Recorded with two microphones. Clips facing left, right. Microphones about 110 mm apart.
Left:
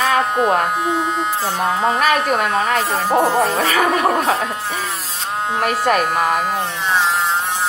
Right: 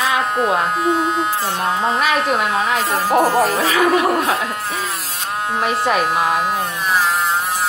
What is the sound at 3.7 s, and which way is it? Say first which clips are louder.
Speech: right 1 dB; 45° left (ahead or behind).